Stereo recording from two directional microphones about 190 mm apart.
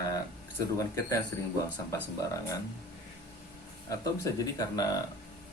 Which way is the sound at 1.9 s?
15° left (ahead or behind).